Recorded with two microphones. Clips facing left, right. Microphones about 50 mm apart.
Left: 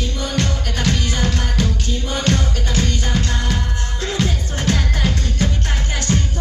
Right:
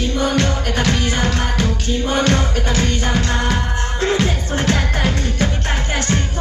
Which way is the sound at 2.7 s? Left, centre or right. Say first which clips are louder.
Right 2 dB; right.